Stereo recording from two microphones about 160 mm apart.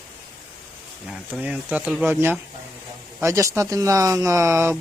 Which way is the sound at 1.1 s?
5° right (ahead or behind).